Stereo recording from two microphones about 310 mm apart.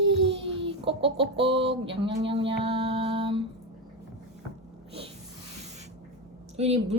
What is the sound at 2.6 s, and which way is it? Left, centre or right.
Music, centre.